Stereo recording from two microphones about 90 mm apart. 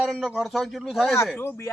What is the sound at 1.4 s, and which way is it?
Speech, 30° left (ahead or behind).